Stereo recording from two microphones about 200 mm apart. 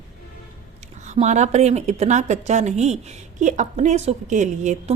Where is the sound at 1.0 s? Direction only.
35° right (ahead or behind).